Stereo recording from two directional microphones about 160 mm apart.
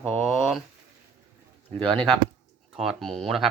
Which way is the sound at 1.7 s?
5° left (ahead or behind).